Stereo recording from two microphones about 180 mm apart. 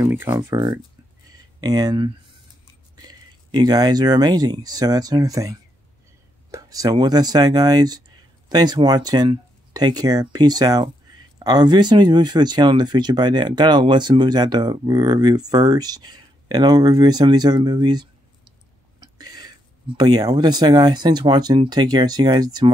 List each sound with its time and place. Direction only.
0.0 s speech: 10° right (ahead or behind)